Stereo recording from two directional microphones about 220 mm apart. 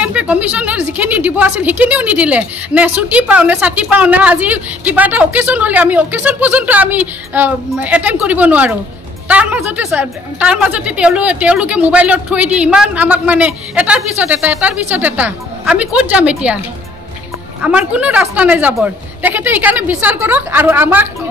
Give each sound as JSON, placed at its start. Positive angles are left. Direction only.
{"t": 0.0, "sound": "a woman's voice", "side_deg": -5}
{"t": 17.6, "sound": "a woman's voice", "side_deg": -5}